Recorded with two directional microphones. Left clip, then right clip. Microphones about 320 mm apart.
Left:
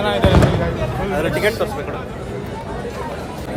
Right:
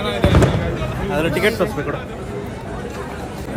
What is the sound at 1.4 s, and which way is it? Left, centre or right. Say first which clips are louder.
Speech: right 2 dB; right.